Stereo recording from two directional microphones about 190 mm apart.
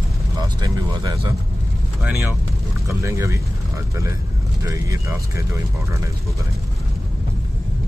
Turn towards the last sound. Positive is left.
turn(degrees=-15)  # may be behind; listen again after turning